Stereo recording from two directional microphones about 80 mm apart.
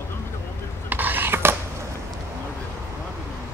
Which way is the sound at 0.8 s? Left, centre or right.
Right.